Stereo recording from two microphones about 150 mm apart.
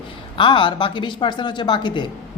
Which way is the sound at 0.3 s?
30° left (ahead or behind).